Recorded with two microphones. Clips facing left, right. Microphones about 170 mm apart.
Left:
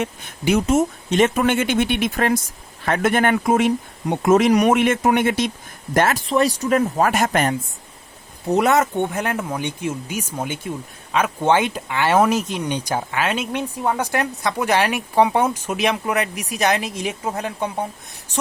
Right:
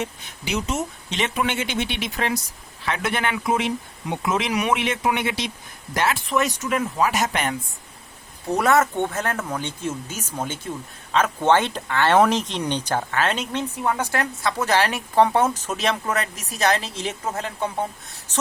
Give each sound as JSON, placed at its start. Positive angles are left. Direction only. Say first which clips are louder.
{"t": 0.0, "sound": "speech", "louder": "left 7 dB", "side_deg": 50}
{"t": 6.2, "sound": "speech", "louder": "left 5 dB", "side_deg": 30}
{"t": 8.4, "sound": "speech", "louder": "left 2 dB", "side_deg": 20}